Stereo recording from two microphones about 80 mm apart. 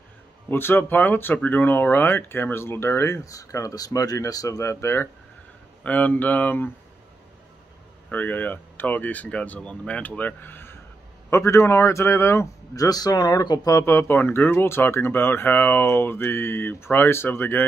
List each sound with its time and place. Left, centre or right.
0.5 s speech: left
5.9 s speech: centre
8.1 s speech: left
12.7 s speech: left
13.7 s speech: left